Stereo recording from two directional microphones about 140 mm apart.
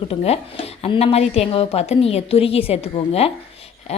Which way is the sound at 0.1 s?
45° left (ahead or behind).